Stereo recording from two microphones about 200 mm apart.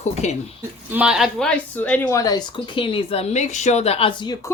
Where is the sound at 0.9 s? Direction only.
5° right (ahead or behind); by 4.5 s 15° left (ahead or behind).